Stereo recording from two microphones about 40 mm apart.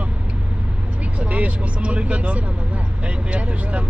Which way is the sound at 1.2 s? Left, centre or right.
Right.